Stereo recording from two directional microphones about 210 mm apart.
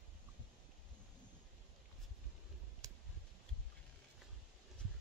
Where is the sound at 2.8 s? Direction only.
15° right (ahead or behind).